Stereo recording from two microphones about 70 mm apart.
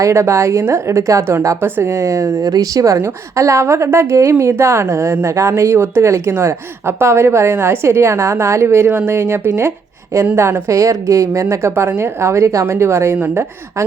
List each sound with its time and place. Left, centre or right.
0.0 s a woman's voice: right
13.1 s speech: right